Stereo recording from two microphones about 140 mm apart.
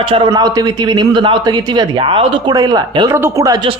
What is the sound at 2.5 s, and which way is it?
Speech, 30° right (ahead or behind).